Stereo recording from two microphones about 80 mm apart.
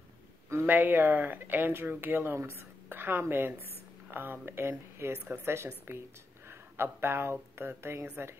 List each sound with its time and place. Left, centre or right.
0.5 s speech: right